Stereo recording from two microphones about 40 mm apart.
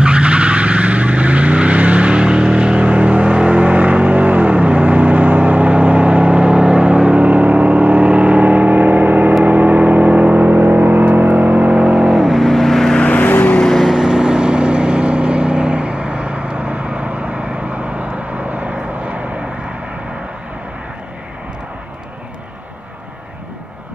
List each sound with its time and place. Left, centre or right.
0.0 s vehicle: right
11.5 s vehicle: right
12.1 s vehicle: centre
12.9 s vehicle: left
13.2 s vehicle: left
13.8 s vehicle: centre; by 19.2 s right